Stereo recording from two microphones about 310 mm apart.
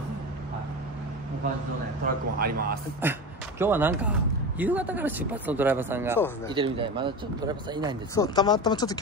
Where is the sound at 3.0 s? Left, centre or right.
Centre.